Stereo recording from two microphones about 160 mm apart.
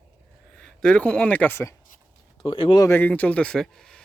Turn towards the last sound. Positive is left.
turn(degrees=5)  # may be behind; listen again after turning